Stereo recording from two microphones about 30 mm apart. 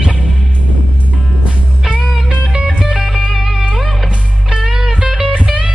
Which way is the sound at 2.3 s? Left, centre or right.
Right.